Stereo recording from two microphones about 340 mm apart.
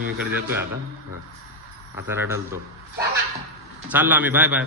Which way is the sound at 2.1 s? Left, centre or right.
Centre.